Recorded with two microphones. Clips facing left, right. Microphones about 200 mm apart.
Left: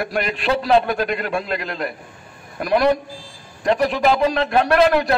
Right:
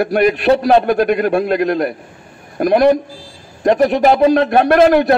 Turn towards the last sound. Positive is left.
turn(degrees=-50)  # may be behind; listen again after turning